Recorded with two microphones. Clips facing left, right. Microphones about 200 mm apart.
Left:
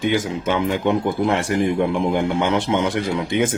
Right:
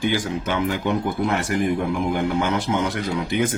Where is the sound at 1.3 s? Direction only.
30° left (ahead or behind).